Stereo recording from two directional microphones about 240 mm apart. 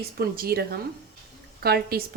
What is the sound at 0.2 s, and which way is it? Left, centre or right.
Speech, right.